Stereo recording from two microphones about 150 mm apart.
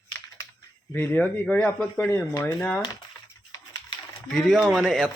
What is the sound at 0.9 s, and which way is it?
Speech, 10° left (ahead or behind).